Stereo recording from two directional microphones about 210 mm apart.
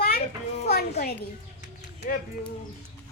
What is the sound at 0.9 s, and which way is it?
Speech, 45° left (ahead or behind).